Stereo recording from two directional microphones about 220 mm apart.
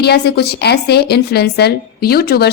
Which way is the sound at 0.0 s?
45° left (ahead or behind).